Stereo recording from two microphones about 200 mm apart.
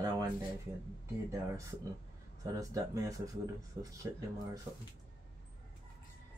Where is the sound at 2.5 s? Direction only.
15° right (ahead or behind).